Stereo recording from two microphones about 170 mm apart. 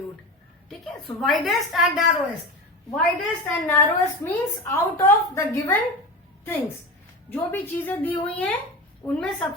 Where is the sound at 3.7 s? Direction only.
15° left (ahead or behind).